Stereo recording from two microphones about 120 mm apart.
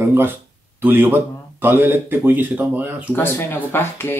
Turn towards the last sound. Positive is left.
turn(degrees=20)  # may be behind; listen again after turning